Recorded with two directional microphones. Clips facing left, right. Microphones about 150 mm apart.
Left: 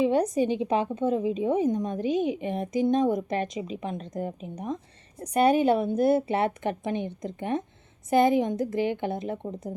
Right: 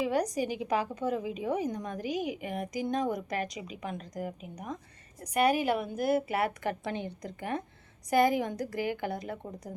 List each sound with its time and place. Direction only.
0.0 s a woman's voice: 25° left (ahead or behind)